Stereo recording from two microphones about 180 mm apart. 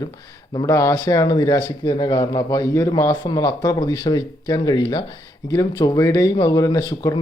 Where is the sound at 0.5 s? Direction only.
20° left (ahead or behind).